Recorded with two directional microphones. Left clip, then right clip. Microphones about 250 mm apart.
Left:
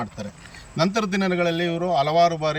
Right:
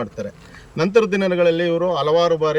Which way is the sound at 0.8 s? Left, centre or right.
Centre.